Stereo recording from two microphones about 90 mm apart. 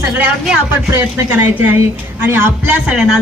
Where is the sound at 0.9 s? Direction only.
20° right (ahead or behind).